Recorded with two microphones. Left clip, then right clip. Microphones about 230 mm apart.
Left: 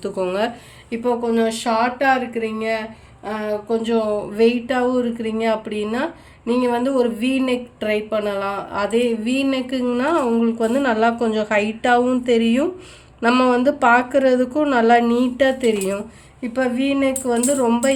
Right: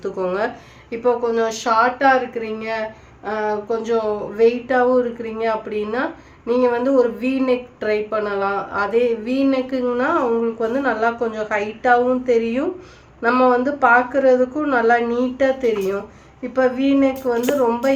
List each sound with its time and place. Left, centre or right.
0.0 s speech: left